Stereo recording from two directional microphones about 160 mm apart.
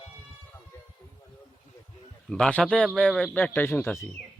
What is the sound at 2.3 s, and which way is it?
A man's voice, 5° left (ahead or behind).